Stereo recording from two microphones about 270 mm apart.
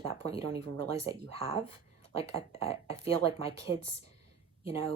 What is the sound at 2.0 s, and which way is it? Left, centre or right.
Speech, left.